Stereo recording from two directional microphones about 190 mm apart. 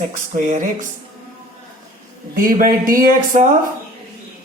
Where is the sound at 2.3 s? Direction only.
45° right (ahead or behind).